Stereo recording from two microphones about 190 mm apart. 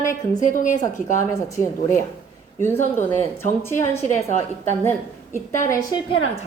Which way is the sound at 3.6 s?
15° left (ahead or behind).